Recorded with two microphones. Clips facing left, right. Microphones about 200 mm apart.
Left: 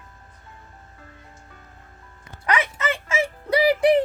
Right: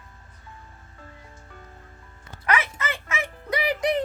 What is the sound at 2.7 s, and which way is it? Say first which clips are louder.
Music: left 6 dB; 30° left (ahead or behind).